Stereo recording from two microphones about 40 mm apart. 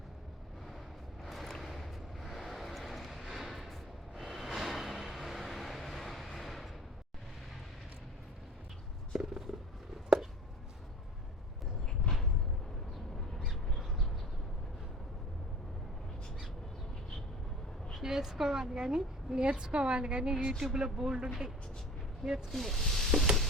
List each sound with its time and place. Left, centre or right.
1.2 s vehicle: centre
9.1 s a sound: centre
13.7 s bird: centre
17.9 s a woman's voice: centre
20.3 s a woman's voice: centre
22.5 s snake: centre